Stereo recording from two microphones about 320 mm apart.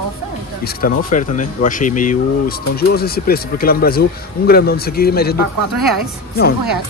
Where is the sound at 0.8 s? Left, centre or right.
Left.